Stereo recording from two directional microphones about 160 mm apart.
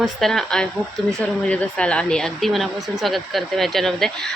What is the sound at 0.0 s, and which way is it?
A woman's voice, centre (ahead or behind).